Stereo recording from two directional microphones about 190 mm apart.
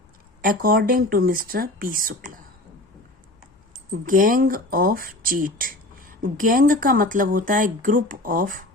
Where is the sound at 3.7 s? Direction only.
45° right (ahead or behind).